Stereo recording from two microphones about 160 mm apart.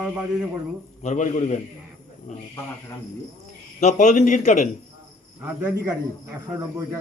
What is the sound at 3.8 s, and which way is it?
Speech, 50° left (ahead or behind).